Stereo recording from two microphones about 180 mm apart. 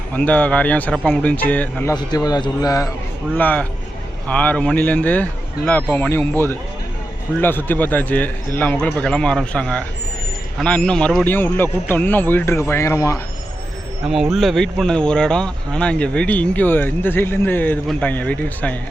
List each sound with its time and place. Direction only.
0.2 s a man's voice: 10° left (ahead or behind)
3.3 s a man's voice: 10° left (ahead or behind)
7.4 s a man's voice: 10° left (ahead or behind)
14.1 s a man's voice: centre (ahead or behind)